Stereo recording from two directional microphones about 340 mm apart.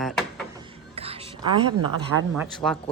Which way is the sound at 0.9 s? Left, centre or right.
Centre.